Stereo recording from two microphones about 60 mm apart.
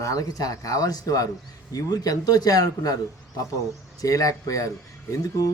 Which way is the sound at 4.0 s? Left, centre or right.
Left.